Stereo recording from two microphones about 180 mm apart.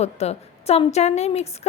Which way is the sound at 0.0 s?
35° left (ahead or behind).